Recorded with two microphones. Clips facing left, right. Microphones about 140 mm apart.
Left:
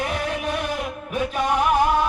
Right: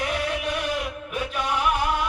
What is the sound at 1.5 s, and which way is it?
Music, 40° left (ahead or behind).